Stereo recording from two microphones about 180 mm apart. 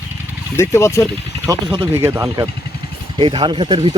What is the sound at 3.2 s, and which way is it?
Speech, 25° right (ahead or behind).